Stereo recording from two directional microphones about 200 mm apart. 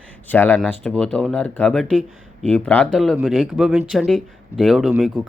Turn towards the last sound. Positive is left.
turn(degrees=0)  # may be behind; listen again after turning